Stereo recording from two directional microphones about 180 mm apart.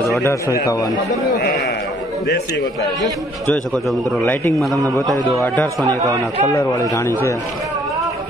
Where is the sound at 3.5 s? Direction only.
5° left (ahead or behind).